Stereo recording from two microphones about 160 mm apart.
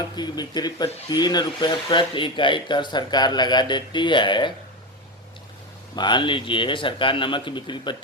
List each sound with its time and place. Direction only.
0.2 s speech: 25° left (ahead or behind)
6.0 s speech: 30° left (ahead or behind)